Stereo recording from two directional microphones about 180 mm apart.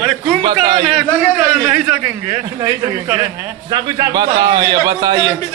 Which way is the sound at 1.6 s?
10° right (ahead or behind).